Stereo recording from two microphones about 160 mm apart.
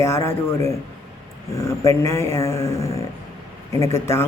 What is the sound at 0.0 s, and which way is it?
Speech, 15° left (ahead or behind).